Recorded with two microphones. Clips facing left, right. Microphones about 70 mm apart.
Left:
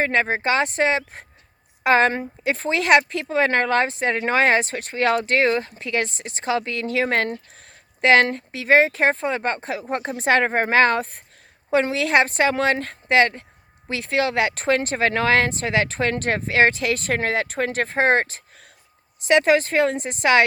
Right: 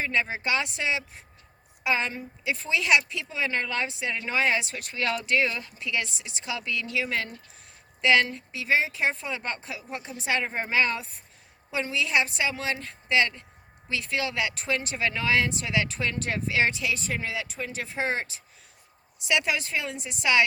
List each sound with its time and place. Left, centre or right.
0.0 s speech: left